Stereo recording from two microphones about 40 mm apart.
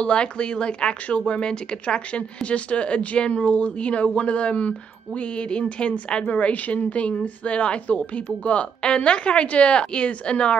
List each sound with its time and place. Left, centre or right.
0.0 s a woman's voice: left
6.2 s a woman's voice: left